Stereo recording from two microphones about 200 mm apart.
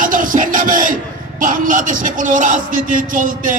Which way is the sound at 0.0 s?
40° right (ahead or behind).